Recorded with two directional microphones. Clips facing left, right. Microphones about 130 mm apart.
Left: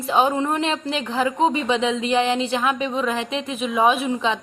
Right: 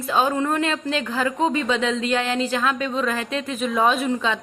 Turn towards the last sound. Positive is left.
turn(degrees=15)  # may be behind; listen again after turning